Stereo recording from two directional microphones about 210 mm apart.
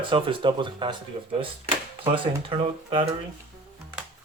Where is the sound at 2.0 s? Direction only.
25° right (ahead or behind).